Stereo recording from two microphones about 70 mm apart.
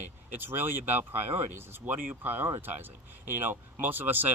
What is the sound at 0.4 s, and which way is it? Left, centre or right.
Speech, right.